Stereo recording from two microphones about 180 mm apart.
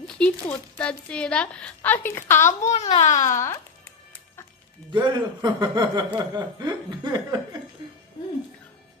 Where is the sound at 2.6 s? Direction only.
40° left (ahead or behind).